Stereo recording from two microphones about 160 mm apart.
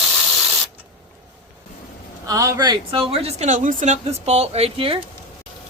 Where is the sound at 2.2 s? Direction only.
20° right (ahead or behind); by 5.0 s 35° right (ahead or behind).